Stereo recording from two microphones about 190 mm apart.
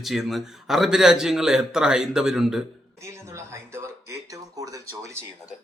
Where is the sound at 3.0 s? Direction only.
15° right (ahead or behind).